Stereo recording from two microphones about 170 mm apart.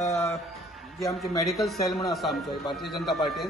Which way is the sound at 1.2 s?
Centre (ahead or behind).